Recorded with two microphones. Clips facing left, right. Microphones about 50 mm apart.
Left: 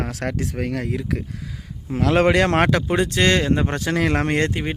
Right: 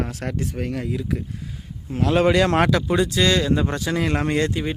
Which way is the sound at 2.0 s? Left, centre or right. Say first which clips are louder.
Left 1 dB; left.